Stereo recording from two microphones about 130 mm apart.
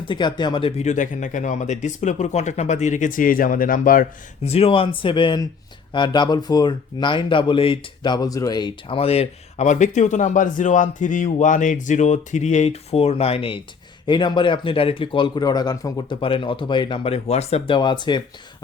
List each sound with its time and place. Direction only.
0.0 s speech: 35° left (ahead or behind)
0.8 s speech: 70° left (ahead or behind); by 4.0 s 90° left
4.4 s speech: 50° left (ahead or behind); by 9.0 s 35° left (ahead or behind)
9.0 s speech: 50° left (ahead or behind)
14.1 s speech: 35° left (ahead or behind)
16.2 s speech: 40° left (ahead or behind)
17.7 s speech: 35° left (ahead or behind)